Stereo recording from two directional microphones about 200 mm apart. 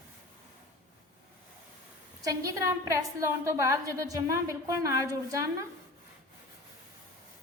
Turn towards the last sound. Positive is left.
turn(degrees=-15)  # may be behind; listen again after turning